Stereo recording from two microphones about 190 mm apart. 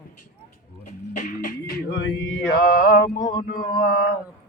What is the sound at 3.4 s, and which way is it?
Music, 50° left (ahead or behind).